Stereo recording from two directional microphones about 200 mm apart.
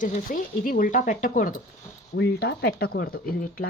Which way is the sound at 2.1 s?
55° left (ahead or behind).